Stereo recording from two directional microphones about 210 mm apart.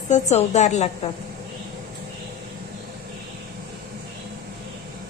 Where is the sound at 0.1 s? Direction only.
35° left (ahead or behind).